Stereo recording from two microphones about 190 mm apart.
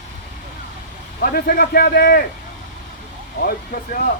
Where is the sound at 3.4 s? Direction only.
50° left (ahead or behind).